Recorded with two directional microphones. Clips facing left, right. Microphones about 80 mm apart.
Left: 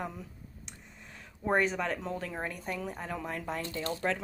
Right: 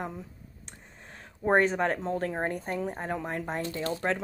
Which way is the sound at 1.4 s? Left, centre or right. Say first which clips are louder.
Right 5 dB; right.